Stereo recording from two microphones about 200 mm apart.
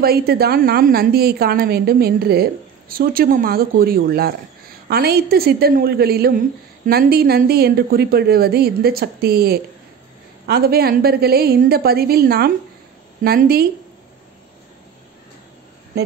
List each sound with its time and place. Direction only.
0.0 s a woman's voice: 50° right (ahead or behind)